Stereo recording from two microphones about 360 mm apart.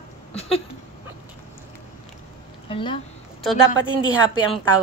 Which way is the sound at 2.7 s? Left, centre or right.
Centre.